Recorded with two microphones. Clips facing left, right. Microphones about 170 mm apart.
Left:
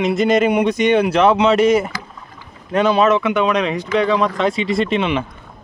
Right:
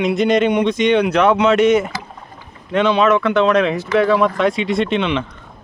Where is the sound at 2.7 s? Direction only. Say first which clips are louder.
Even; 40° left (ahead or behind).